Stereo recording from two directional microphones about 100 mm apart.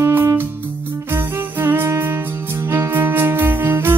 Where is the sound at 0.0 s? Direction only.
25° right (ahead or behind).